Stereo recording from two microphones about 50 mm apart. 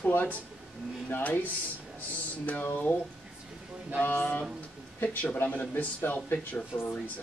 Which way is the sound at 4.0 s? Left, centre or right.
Left.